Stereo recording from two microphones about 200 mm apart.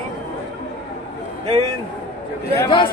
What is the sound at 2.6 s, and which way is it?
Speech, 25° left (ahead or behind).